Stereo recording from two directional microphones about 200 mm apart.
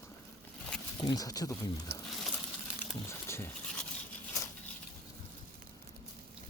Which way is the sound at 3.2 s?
15° left (ahead or behind).